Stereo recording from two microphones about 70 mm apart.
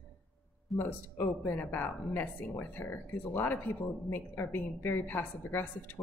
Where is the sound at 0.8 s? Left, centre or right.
Left.